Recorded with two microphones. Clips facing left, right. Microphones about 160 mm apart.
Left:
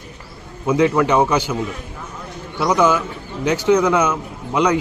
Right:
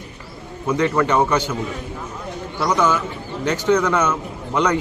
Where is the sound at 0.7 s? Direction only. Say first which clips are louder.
Left 3 dB; 10° left (ahead or behind).